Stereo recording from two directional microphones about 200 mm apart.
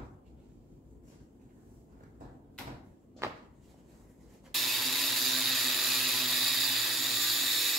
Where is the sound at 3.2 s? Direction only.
15° right (ahead or behind).